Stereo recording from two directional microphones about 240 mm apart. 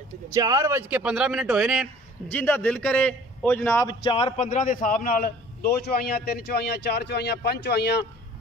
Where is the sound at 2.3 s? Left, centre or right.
Centre.